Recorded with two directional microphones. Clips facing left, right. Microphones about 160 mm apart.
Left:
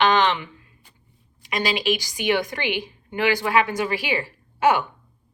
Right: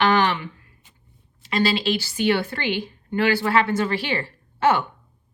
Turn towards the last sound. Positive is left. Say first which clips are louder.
# even
turn(degrees=15)  # may be behind; listen again after turning